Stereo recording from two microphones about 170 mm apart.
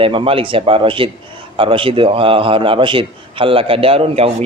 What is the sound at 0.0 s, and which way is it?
A man's voice, 30° right (ahead or behind).